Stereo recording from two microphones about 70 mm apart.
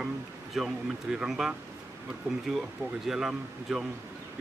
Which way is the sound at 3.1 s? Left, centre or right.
Centre.